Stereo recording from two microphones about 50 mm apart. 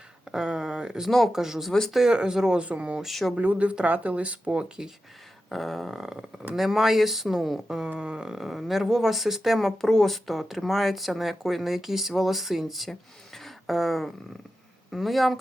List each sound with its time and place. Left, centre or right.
0.3 s a sound: centre
1.3 s speech: centre
2.6 s speech: right
3.0 s speech: centre
3.3 s speech: right
5.5 s speech: centre
7.9 s speech: centre